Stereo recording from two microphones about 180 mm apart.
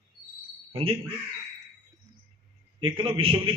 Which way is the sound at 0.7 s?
30° right (ahead or behind).